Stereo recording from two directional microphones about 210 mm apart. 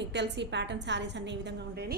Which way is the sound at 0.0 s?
55° right (ahead or behind).